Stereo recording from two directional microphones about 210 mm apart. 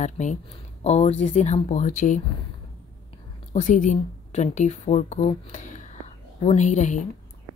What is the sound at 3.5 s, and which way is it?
Speech, 35° left (ahead or behind).